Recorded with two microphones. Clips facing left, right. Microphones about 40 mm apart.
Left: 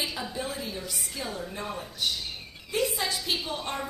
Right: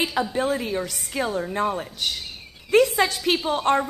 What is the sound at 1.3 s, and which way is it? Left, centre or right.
A woman's voice, right.